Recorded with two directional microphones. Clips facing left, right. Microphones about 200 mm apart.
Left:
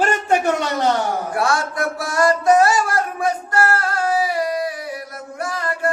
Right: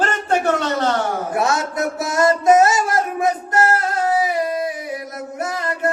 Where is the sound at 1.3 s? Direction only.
20° right (ahead or behind).